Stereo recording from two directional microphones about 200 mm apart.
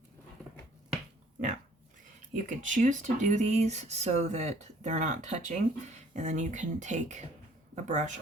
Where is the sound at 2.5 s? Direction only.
40° right (ahead or behind).